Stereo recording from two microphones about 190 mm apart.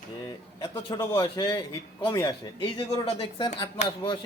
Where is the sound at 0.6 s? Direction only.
25° left (ahead or behind).